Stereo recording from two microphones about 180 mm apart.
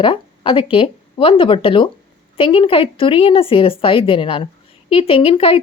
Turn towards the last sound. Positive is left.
turn(degrees=30)  # may be behind; listen again after turning